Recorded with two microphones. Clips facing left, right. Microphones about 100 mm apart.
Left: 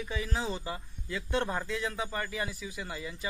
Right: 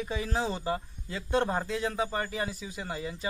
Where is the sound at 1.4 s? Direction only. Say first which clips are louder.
Right 4 dB; 25° right (ahead or behind).